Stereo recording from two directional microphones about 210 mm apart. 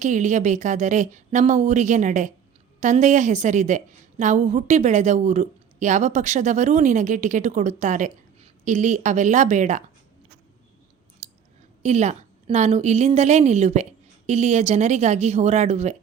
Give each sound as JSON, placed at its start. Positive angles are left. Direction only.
{"t": 0.0, "sound": "a woman's voice", "side_deg": -35}
{"t": 11.2, "sound": "clicking", "side_deg": -30}
{"t": 11.8, "sound": "a woman's voice", "side_deg": -35}